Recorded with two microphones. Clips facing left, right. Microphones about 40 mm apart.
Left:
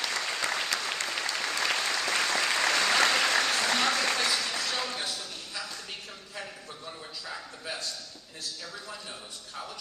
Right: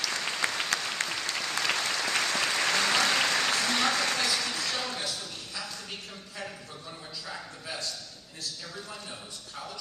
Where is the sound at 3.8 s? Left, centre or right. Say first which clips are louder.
Even; centre.